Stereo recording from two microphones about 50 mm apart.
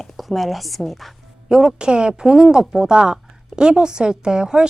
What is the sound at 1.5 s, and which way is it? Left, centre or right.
Speech, centre.